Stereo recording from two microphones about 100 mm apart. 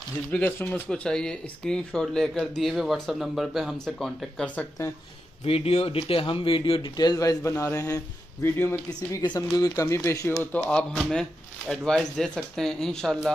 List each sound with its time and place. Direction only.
0.3 s speech: 15° left (ahead or behind)
0.8 s speech: 5° left (ahead or behind)
5.4 s speech: 75° left (ahead or behind); by 9.2 s 25° left (ahead or behind)
9.2 s speech: 45° left (ahead or behind)
9.8 s speech: 30° left (ahead or behind)
10.2 s speech: 20° left (ahead or behind)